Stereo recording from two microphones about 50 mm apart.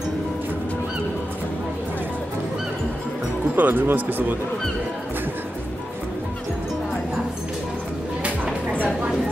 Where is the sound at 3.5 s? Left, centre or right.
Right.